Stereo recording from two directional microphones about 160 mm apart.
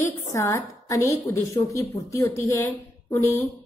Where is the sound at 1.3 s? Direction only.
20° left (ahead or behind).